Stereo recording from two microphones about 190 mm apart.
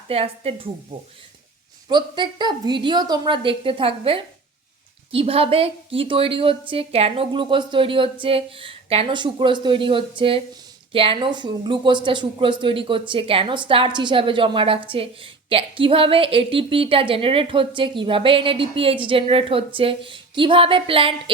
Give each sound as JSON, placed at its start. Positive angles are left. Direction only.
{"t": 0.1, "sound": "a woman's voice", "side_deg": -30}